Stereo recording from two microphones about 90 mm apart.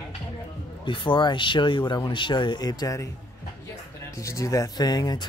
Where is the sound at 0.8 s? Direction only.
70° left (ahead or behind); by 3.1 s 40° left (ahead or behind).